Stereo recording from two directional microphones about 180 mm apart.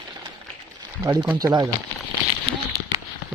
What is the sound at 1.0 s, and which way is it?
Speech, 20° right (ahead or behind).